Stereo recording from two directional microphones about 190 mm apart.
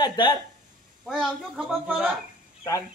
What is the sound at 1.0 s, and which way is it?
Speech, centre (ahead or behind).